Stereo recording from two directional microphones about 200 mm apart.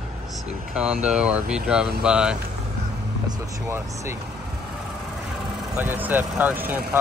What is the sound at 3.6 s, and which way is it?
Speech, 15° right (ahead or behind).